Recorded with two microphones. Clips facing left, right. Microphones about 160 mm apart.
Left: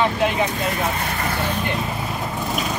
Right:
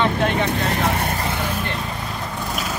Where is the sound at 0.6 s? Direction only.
75° right (ahead or behind).